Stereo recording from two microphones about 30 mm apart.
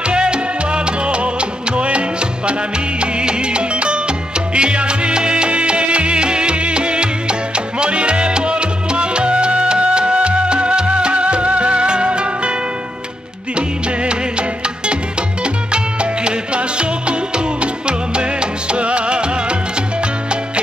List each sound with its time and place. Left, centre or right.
0.0 s music: right
15.4 s music: right